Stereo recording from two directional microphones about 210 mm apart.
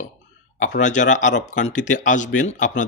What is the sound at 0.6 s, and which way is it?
Speech, 35° left (ahead or behind).